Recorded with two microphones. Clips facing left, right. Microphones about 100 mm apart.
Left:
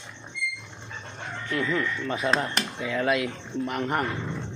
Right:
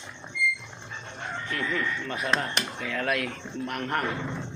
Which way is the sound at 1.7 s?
20° left (ahead or behind).